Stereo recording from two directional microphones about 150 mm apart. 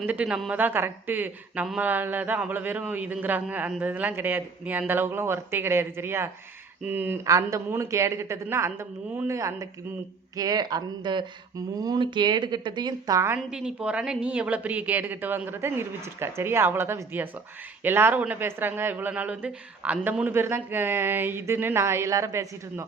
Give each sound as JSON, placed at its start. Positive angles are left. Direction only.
{"t": 0.0, "sound": "a woman's voice", "side_deg": -10}
{"t": 13.5, "sound": "speech", "side_deg": -5}